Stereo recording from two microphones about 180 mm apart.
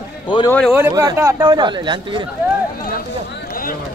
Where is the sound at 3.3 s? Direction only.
50° left (ahead or behind).